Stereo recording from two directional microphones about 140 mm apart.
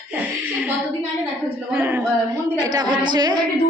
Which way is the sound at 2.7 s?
35° right (ahead or behind).